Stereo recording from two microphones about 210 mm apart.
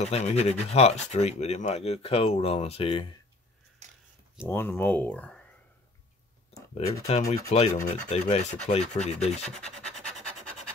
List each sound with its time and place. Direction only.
0.0 s speech: 30° left (ahead or behind)
4.5 s speech: 10° left (ahead or behind)
7.1 s rub: 35° left (ahead or behind)
9.5 s speech: 5° left (ahead or behind)